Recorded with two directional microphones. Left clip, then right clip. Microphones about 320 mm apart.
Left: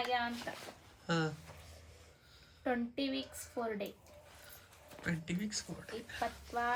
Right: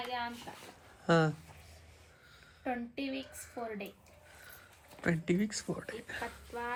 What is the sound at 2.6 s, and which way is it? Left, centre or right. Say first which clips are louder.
A woman's voice: left 1 dB; centre.